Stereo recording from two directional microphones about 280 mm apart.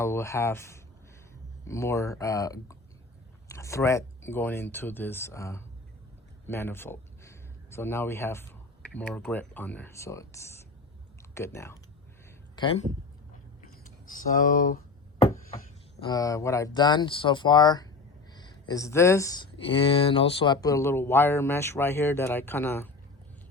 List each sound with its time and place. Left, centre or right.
0.0 s speech: centre
13.8 s a sound: left
15.3 s speech: centre